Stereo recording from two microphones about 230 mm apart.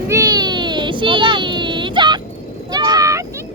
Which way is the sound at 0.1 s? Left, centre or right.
Centre.